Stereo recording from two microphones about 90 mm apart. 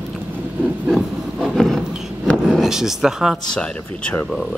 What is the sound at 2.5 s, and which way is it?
Speech, 5° right (ahead or behind).